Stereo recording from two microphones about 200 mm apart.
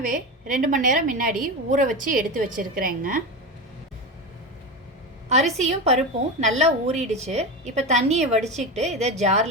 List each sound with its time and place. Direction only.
0.0 s a woman's voice: 40° right (ahead or behind)
5.3 s a woman's voice: 35° right (ahead or behind)